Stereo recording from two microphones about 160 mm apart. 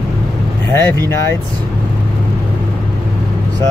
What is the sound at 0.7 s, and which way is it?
Speech, 15° left (ahead or behind).